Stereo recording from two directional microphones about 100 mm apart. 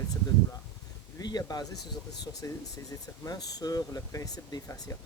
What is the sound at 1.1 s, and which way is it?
Speech, 40° left (ahead or behind).